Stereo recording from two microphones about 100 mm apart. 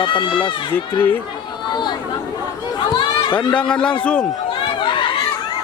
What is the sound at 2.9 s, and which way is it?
Speech, 50° left (ahead or behind).